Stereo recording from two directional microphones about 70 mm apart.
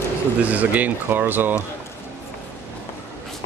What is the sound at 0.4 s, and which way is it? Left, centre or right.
Speech, right.